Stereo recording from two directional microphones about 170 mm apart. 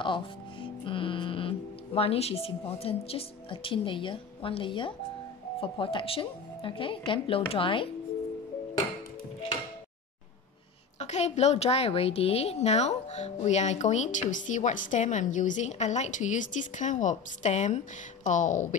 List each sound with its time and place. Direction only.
0.0 s speech: 30° left (ahead or behind)
11.0 s a woman's voice: 40° left (ahead or behind)